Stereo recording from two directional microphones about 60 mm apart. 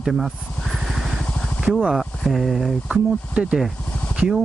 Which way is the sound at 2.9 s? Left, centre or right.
Centre.